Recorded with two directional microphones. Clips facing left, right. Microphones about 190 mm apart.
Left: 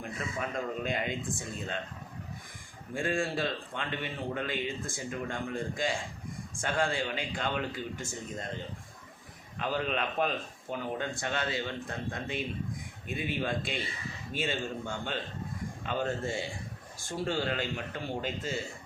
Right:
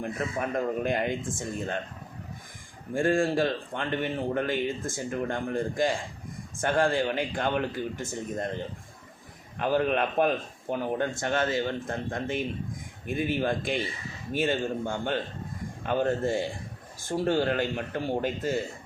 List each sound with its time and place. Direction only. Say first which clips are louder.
0.0 s speech: right 6 dB; 50° right (ahead or behind)
2.9 s speech: right 7 dB; 50° right (ahead or behind)
9.6 s speech: right 7 dB; 50° right (ahead or behind)